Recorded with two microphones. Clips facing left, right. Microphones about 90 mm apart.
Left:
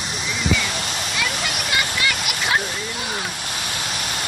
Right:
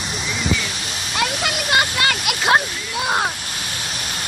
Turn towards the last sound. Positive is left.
turn(degrees=-65)  # may be behind; listen again after turning